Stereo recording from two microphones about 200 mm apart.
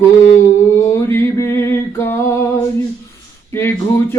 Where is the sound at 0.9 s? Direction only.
15° left (ahead or behind).